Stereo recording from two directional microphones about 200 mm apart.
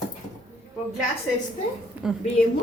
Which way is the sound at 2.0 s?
5° right (ahead or behind).